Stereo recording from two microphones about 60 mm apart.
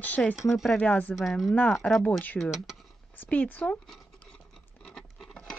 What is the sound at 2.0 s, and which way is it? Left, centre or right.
Speech, left.